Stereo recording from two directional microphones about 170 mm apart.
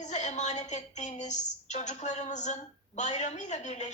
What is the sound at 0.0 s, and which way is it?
A woman's voice, 45° left (ahead or behind).